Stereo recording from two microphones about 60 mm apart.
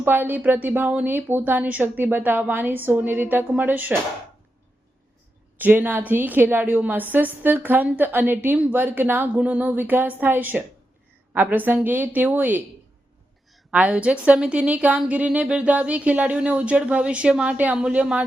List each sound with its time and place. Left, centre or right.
0.0 s a woman's voice: right
5.5 s a woman's voice: right
13.7 s a woman's voice: right